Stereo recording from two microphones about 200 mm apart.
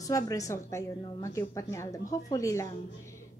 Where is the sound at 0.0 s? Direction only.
15° left (ahead or behind).